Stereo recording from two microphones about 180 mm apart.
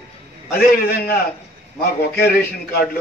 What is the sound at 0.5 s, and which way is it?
A man's voice, 60° left (ahead or behind).